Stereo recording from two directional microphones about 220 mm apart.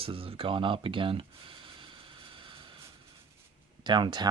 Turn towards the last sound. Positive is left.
turn(degrees=-20)  # may be behind; listen again after turning